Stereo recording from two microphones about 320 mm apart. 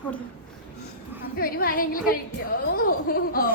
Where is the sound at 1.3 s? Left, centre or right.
Left.